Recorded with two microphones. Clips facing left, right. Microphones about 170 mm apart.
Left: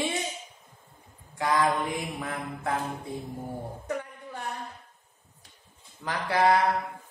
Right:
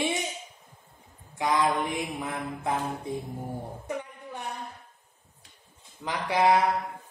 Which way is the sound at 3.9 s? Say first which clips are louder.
Left 2 dB; 20° right (ahead or behind).